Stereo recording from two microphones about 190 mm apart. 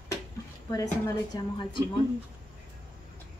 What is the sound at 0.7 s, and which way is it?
Speech, 15° left (ahead or behind).